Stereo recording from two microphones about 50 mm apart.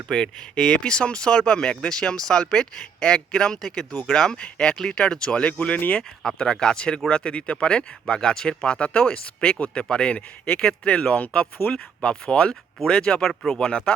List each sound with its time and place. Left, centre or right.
0.1 s speech: centre
6.0 s speech: centre
13.7 s speech: centre